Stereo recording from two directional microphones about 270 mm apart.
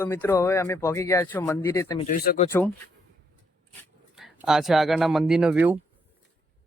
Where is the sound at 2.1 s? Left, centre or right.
Left.